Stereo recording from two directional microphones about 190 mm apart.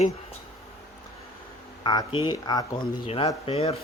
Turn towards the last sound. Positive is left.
turn(degrees=30)  # may be behind; listen again after turning